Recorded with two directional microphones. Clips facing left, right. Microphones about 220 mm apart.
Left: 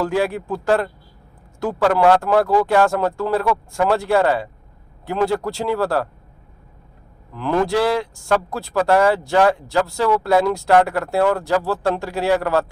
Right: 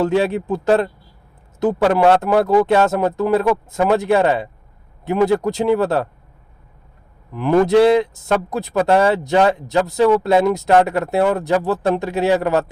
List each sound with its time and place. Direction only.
0.0 s speech: 20° right (ahead or behind)
7.3 s speech: 15° right (ahead or behind)